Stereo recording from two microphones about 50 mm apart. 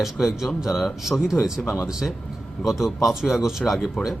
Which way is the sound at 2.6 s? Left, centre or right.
Centre.